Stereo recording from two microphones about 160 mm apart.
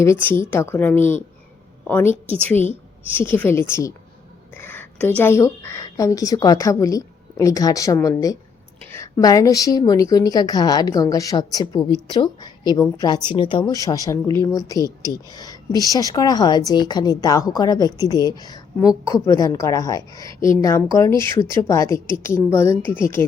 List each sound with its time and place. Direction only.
0.0 s a woman's voice: 15° left (ahead or behind)